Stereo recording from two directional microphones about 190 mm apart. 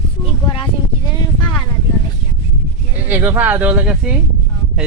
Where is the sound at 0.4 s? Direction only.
25° left (ahead or behind).